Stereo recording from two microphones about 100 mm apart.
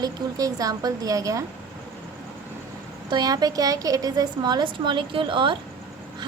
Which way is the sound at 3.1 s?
45° right (ahead or behind).